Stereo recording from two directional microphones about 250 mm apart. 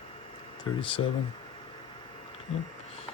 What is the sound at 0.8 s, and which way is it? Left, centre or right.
Speech, left.